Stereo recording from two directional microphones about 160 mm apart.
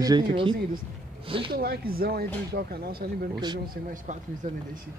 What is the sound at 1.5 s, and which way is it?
Speech, 75° right (ahead or behind).